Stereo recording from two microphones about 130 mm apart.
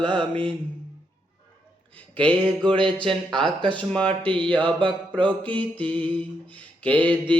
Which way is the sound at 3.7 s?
10° left (ahead or behind).